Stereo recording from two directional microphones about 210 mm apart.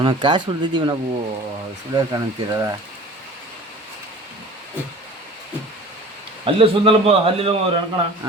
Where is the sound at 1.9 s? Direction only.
15° right (ahead or behind).